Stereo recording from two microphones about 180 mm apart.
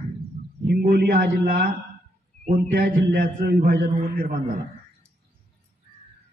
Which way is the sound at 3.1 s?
60° right (ahead or behind).